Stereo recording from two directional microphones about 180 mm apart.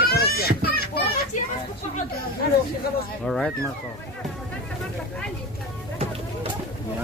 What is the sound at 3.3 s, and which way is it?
Speech, centre (ahead or behind).